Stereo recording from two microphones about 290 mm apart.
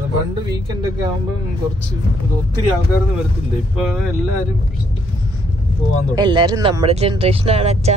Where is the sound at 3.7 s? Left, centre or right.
Centre.